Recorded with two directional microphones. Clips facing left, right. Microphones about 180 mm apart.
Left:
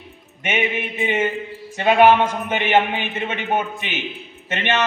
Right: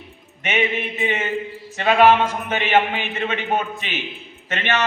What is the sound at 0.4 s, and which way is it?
A man's voice, 10° left (ahead or behind).